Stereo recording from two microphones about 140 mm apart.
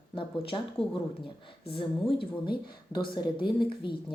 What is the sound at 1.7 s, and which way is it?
Speech, 40° left (ahead or behind).